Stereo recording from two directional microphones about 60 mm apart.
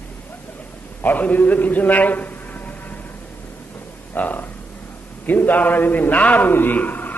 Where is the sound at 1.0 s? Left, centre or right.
Left.